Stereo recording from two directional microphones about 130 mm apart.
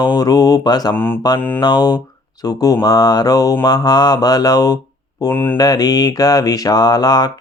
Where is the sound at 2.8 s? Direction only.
30° left (ahead or behind).